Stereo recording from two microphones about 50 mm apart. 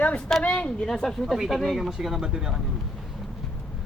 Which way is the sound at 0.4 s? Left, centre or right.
Left.